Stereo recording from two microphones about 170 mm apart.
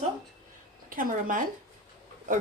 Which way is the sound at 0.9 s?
55° right (ahead or behind).